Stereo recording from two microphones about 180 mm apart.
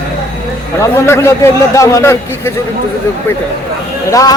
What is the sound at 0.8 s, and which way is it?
A man's voice, 15° left (ahead or behind).